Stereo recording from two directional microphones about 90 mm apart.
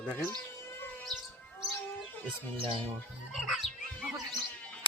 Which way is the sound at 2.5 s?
85° right.